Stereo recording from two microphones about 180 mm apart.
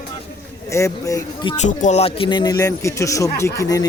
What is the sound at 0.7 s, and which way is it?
Music, 15° left (ahead or behind).